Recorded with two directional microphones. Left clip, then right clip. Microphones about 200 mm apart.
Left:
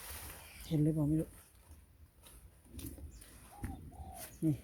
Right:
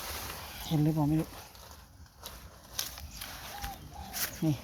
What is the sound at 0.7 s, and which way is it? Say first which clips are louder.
Speech: right 3 dB; 30° left (ahead or behind).